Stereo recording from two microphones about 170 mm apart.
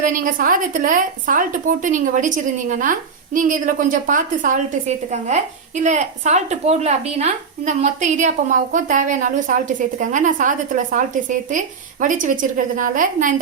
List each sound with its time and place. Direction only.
0.0 s speech: 50° right (ahead or behind)